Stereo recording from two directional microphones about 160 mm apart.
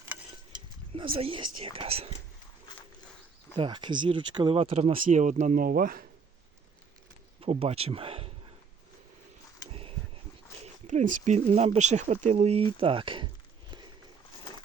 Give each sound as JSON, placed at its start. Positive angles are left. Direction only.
{"t": 0.9, "sound": "speech", "side_deg": -35}
{"t": 3.5, "sound": "speech", "side_deg": -30}
{"t": 4.9, "sound": "speech", "side_deg": -55}
{"t": 7.4, "sound": "speech", "side_deg": -40}
{"t": 9.6, "sound": "a sound", "side_deg": -35}
{"t": 10.6, "sound": "speech", "side_deg": -50}